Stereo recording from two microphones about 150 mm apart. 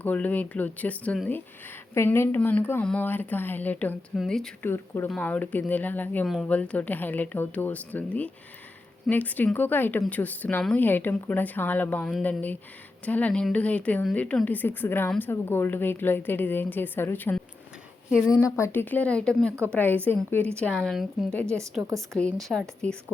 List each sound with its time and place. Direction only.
0.0 s a woman's voice: 10° left (ahead or behind)
21.6 s a woman's voice: 20° right (ahead or behind)
22.2 s speech: 5° left (ahead or behind)